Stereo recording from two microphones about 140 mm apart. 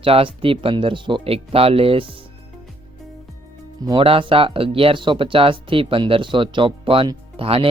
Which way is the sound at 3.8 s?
40° right (ahead or behind).